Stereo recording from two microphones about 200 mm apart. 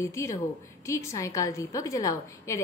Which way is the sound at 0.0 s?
15° left (ahead or behind).